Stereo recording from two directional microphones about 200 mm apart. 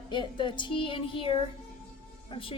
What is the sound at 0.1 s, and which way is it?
A woman's voice, 25° left (ahead or behind).